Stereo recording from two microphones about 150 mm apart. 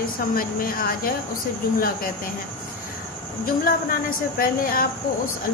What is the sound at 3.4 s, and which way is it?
Speech, 70° left (ahead or behind).